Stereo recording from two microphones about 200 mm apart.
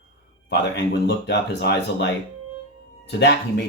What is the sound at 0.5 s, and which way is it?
Speech, 60° left (ahead or behind).